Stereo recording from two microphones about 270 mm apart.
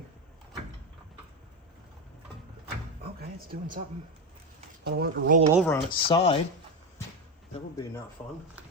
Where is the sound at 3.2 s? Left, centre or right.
Right.